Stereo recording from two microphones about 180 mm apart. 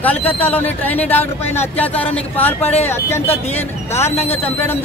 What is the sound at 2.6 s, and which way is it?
Speech, 35° left (ahead or behind).